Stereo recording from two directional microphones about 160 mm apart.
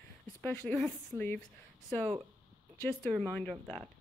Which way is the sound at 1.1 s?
15° right (ahead or behind).